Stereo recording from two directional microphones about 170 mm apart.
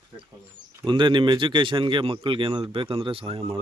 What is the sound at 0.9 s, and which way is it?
Speech, 30° right (ahead or behind).